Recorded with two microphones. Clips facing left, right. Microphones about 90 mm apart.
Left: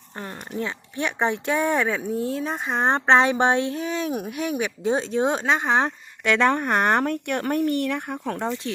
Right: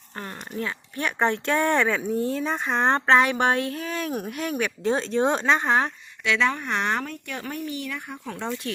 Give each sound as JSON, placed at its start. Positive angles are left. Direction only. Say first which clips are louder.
{"t": 0.5, "sound": "speech", "louder": "left 2 dB", "side_deg": 25}
{"t": 3.1, "sound": "a woman's voice", "louder": "left 3 dB", "side_deg": 25}
{"t": 6.2, "sound": "speech", "louder": "left 4 dB", "side_deg": 50}
{"t": 8.4, "sound": "a woman's voice", "louder": "right 1 dB", "side_deg": 25}